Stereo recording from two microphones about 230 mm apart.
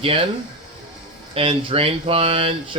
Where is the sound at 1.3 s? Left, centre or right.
Right.